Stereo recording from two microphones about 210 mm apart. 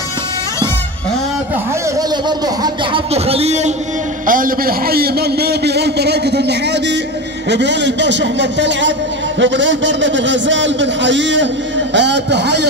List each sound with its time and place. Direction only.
2.0 s a man's voice: 20° right (ahead or behind); by 12.6 s 55° right (ahead or behind)